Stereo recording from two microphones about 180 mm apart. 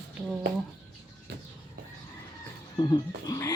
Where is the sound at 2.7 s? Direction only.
25° left (ahead or behind).